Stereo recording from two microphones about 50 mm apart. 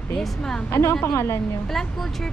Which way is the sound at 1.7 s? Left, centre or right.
Centre.